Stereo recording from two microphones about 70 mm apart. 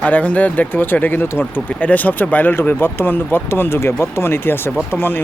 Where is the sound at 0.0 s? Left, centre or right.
Left.